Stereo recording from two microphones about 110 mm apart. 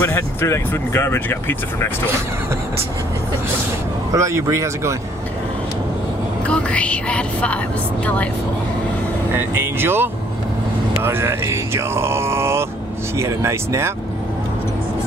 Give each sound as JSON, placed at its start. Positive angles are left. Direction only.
{"t": 0.0, "sound": "speech", "side_deg": 20}
{"t": 4.1, "sound": "speech", "side_deg": -30}
{"t": 6.4, "sound": "speech", "side_deg": 10}
{"t": 9.3, "sound": "speech", "side_deg": -20}